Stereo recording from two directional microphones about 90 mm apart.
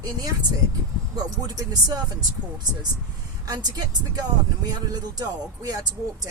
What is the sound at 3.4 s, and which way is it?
Speech, 50° right (ahead or behind).